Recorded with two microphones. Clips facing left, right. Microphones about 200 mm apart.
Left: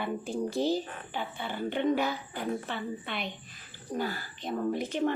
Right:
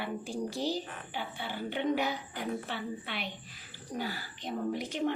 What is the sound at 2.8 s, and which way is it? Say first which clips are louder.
Speech: left 2 dB; 50° left (ahead or behind).